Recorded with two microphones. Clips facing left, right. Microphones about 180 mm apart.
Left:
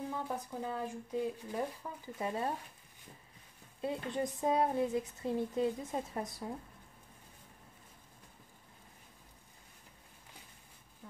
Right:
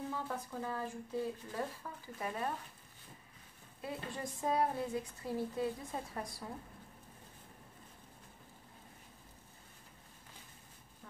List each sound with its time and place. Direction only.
0.1 s speech: 15° left (ahead or behind)
3.8 s speech: 20° left (ahead or behind)